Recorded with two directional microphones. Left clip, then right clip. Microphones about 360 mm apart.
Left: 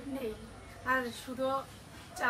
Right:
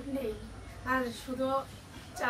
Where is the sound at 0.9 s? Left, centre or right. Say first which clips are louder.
Even; centre.